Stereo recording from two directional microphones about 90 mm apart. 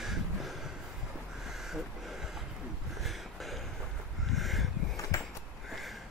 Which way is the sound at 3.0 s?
Centre (ahead or behind).